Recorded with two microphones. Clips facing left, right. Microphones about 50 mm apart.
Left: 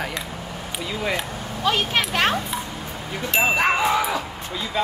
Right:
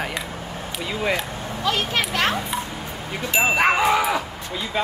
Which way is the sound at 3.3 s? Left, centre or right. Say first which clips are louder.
Right 1 dB; centre.